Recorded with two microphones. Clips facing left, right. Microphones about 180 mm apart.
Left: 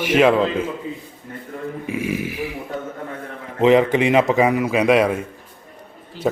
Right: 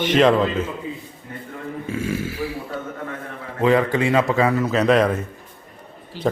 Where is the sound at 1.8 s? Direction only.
15° left (ahead or behind).